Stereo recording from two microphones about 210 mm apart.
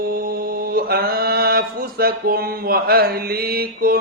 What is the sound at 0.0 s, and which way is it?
Mantra, 45° right (ahead or behind).